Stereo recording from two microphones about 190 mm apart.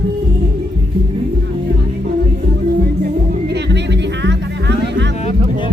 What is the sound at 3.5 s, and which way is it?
Music, 65° right (ahead or behind).